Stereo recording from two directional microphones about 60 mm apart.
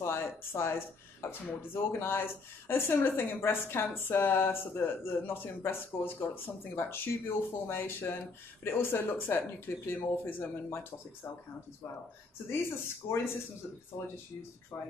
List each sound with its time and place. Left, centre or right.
0.0 s speech: left
12.4 s speech: left